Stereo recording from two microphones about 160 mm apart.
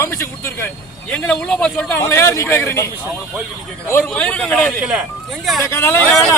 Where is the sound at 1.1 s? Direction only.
5° left (ahead or behind).